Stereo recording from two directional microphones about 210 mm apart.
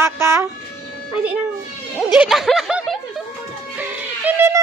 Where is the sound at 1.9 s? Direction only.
Centre (ahead or behind).